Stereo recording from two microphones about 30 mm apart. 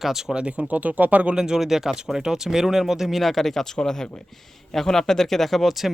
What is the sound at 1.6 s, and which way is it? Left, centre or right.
Speech, centre.